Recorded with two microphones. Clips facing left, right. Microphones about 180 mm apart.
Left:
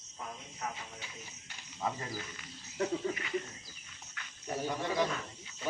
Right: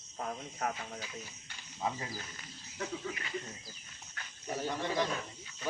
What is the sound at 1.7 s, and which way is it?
Speech, 10° right (ahead or behind).